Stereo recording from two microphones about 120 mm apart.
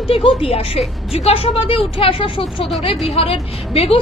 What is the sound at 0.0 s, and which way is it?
A woman's voice, 50° left (ahead or behind).